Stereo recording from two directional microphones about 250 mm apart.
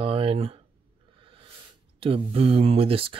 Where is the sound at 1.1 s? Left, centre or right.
Right.